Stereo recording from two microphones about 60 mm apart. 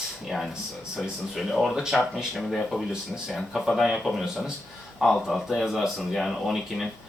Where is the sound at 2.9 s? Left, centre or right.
Centre.